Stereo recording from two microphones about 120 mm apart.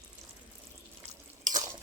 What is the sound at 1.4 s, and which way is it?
Drip, 35° right (ahead or behind).